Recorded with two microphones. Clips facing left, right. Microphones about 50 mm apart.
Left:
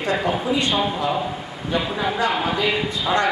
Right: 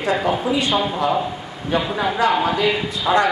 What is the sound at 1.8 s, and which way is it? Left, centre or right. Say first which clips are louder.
A man's voice: right 3 dB; centre.